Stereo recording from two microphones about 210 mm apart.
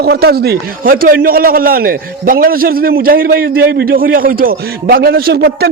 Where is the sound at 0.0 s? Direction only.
50° right (ahead or behind).